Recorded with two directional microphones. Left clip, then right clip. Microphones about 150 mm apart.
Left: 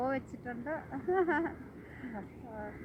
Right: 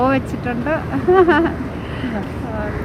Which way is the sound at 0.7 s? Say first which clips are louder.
Right 19 dB; 30° left (ahead or behind).